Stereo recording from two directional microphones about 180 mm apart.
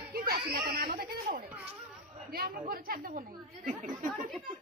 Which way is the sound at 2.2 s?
55° right (ahead or behind).